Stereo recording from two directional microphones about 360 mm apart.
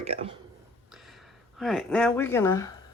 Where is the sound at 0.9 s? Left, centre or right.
Centre.